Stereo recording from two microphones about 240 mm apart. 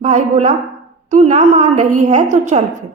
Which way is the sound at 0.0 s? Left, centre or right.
Right.